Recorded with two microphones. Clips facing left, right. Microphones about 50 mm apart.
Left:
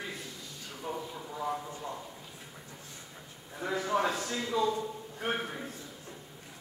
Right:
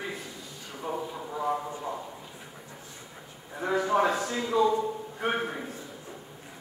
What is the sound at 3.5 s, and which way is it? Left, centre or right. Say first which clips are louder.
A man's voice: right 5 dB; centre.